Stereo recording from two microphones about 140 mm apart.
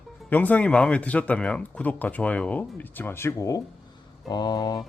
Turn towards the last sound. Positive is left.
turn(degrees=25)  # may be behind; listen again after turning